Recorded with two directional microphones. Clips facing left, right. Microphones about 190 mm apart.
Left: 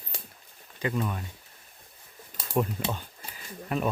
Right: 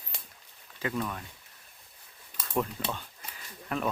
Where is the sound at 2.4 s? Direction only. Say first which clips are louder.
Left 3 dB; 10° left (ahead or behind).